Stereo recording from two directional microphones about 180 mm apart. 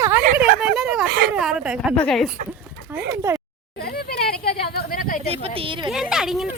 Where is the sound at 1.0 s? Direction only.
60° right (ahead or behind).